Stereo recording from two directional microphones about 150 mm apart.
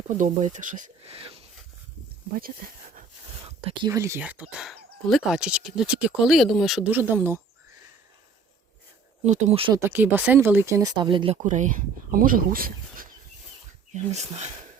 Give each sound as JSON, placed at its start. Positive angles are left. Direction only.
{"t": 0.2, "sound": "speech", "side_deg": -55}
{"t": 1.0, "sound": "a sound", "side_deg": -40}
{"t": 3.8, "sound": "speech", "side_deg": -20}
{"t": 9.2, "sound": "speech", "side_deg": -45}
{"t": 9.9, "sound": "speech", "side_deg": -10}
{"t": 11.4, "sound": "speech", "side_deg": -55}
{"t": 13.9, "sound": "speech", "side_deg": -50}